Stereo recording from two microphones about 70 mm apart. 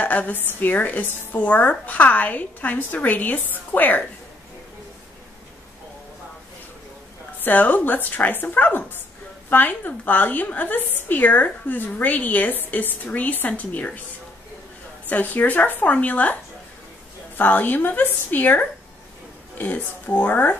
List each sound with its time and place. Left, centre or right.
0.0 s speech: left
7.3 s speech: left
15.0 s speech: left
17.4 s speech: left